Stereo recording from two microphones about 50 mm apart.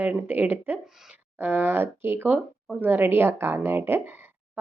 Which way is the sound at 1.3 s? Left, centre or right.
Right.